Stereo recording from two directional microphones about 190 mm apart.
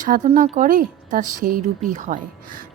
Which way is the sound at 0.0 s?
40° right (ahead or behind).